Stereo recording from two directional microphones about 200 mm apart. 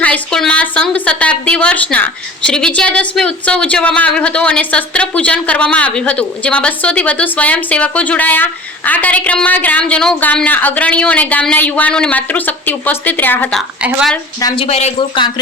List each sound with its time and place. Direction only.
0.0 s a sound: 5° left (ahead or behind)
2.5 s speech: 5° left (ahead or behind)
14.4 s speech: 25° left (ahead or behind)